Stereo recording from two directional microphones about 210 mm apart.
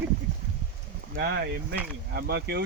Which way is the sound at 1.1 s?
55° right (ahead or behind).